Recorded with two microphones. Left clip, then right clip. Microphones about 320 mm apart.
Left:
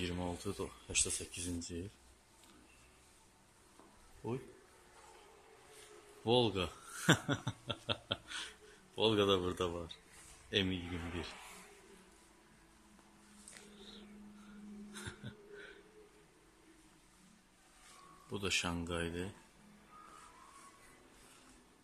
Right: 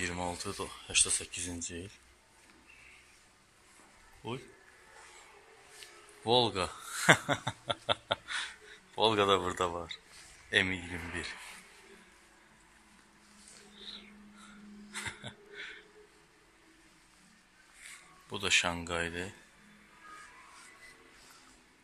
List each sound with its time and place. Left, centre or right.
0.0 s a sound: centre
0.8 s speech: centre
6.2 s speech: centre
13.7 s a sound: centre
15.0 s music: centre
18.3 s speech: centre